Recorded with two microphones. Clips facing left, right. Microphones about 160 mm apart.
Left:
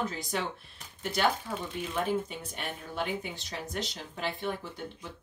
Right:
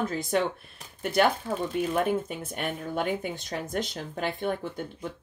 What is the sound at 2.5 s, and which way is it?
Speech, 50° right (ahead or behind).